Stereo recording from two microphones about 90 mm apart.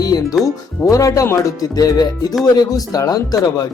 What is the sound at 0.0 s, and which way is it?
Speech, 45° left (ahead or behind).